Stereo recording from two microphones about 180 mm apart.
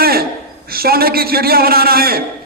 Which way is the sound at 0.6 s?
55° right (ahead or behind).